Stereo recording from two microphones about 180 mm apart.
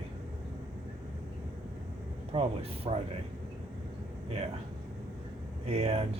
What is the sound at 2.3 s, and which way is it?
Speech, 35° right (ahead or behind).